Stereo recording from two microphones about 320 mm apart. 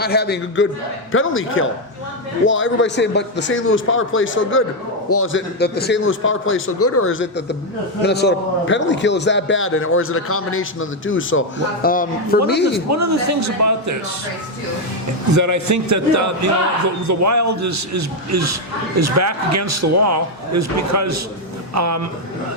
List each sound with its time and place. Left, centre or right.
0.0 s a man's voice: left
12.9 s a man's voice: right
15.4 s a man's voice: right